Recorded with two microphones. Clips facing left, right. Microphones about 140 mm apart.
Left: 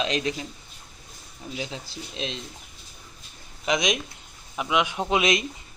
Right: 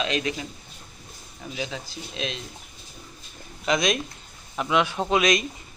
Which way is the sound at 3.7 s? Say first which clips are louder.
Right 1 dB; 15° left (ahead or behind).